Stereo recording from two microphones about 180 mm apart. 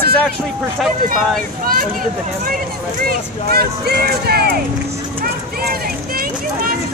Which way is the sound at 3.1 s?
60° right (ahead or behind).